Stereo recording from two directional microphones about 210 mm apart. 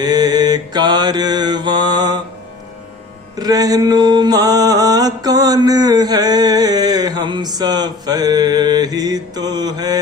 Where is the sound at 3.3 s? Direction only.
20° right (ahead or behind).